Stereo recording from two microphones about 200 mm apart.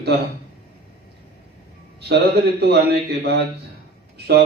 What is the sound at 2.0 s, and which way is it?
A man's voice, 55° right (ahead or behind).